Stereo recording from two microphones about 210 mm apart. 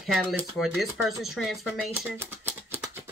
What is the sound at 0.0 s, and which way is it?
Speech, centre (ahead or behind).